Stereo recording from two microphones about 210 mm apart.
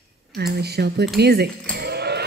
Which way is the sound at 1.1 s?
50° right (ahead or behind).